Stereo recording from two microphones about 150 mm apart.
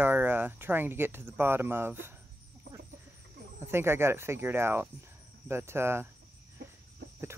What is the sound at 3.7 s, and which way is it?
Speech, 15° right (ahead or behind).